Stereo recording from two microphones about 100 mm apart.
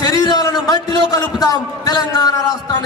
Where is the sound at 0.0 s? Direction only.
40° left (ahead or behind).